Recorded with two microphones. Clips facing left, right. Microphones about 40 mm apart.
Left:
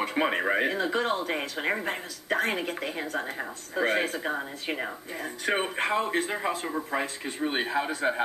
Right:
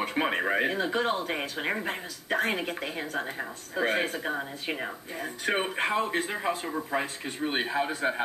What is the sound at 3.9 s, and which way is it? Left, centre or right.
Speech, centre.